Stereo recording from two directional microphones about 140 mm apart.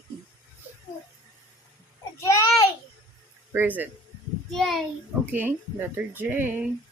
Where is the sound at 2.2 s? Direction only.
20° left (ahead or behind).